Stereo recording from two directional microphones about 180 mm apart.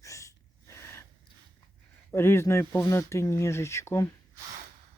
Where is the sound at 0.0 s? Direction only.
15° left (ahead or behind).